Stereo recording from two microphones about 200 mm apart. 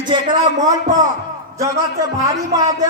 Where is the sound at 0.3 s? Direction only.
20° right (ahead or behind).